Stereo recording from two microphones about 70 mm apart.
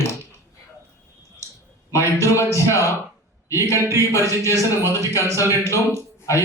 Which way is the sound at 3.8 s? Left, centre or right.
Right.